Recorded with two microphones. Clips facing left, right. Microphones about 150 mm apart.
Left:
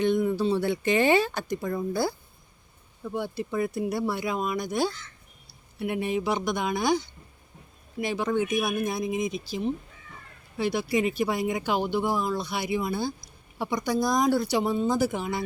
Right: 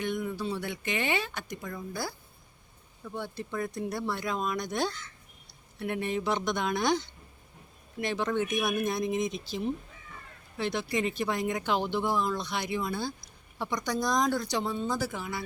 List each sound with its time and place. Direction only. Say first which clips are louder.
0.0 s speech: left 8 dB; 30° left (ahead or behind)
3.0 s speech: left 6 dB; 15° left (ahead or behind)